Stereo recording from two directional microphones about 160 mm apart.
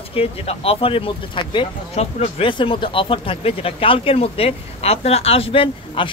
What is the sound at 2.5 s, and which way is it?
Speech, 30° left (ahead or behind).